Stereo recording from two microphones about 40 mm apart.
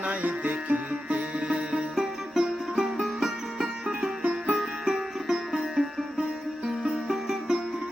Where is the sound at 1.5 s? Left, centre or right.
Centre.